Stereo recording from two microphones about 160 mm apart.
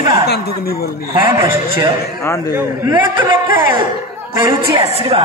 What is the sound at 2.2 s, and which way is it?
Speech, 20° left (ahead or behind).